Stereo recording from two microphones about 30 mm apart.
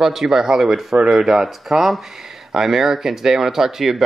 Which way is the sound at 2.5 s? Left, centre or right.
Centre.